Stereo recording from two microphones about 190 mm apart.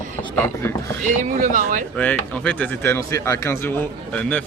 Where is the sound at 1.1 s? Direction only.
40° right (ahead or behind).